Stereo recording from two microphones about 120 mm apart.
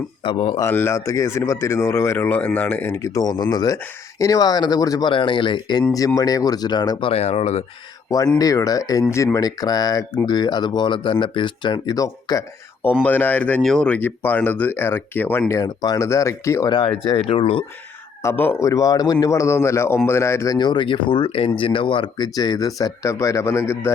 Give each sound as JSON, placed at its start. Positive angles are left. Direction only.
{"t": 0.2, "sound": "speech", "side_deg": 45}
{"t": 0.6, "sound": "speech", "side_deg": 20}
{"t": 7.1, "sound": "speech", "side_deg": 65}
{"t": 8.4, "sound": "speech", "side_deg": 30}
{"t": 12.8, "sound": "speech", "side_deg": 15}
{"t": 15.6, "sound": "speech", "side_deg": 35}
{"t": 16.6, "sound": "speech", "side_deg": 45}
{"t": 18.2, "sound": "speech", "side_deg": 20}
{"t": 20.6, "sound": "speech", "side_deg": 40}